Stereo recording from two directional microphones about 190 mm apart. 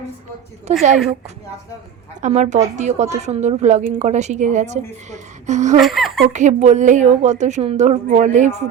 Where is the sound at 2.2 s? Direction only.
40° right (ahead or behind).